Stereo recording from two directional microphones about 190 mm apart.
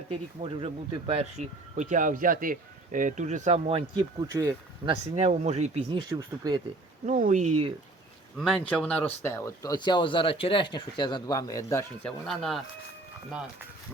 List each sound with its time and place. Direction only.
0.1 s speech: 30° right (ahead or behind)
4.9 s speech: 35° right (ahead or behind)
6.0 s speech: 20° right (ahead or behind)
7.0 s speech: 40° right (ahead or behind)
8.4 s speech: 5° left (ahead or behind)
12.0 s speech: centre (ahead or behind)